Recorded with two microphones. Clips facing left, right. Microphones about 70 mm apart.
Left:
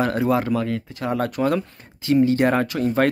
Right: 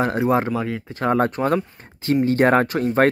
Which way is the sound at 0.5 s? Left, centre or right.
Centre.